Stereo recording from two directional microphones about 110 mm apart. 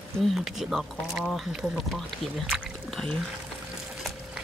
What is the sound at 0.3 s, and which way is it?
Speech, 5° right (ahead or behind).